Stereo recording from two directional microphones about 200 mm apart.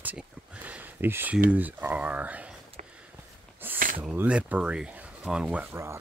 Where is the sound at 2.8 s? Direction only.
40° right (ahead or behind).